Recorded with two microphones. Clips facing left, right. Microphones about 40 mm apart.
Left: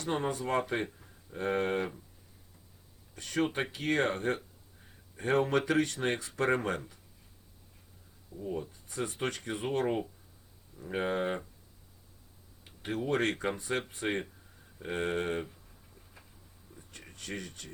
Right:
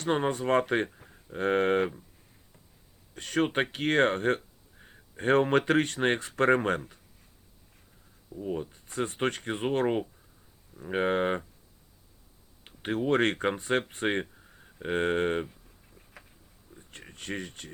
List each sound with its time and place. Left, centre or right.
0.0 s speech: right
3.2 s speech: right
8.4 s speech: right
12.6 s speech: right
16.9 s speech: right